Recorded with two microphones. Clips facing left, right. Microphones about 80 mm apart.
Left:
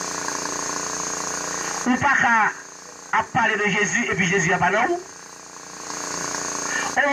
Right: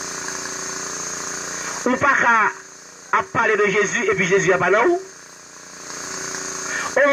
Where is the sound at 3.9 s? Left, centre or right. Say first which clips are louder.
Right 4 dB; right.